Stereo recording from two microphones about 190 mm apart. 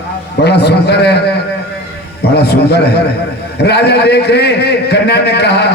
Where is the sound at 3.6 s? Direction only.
60° left (ahead or behind).